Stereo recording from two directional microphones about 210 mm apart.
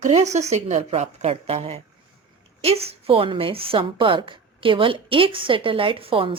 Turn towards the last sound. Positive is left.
turn(degrees=-25)  # may be behind; listen again after turning